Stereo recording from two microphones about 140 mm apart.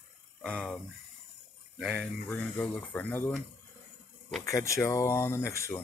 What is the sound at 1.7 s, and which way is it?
Speech, 5° right (ahead or behind).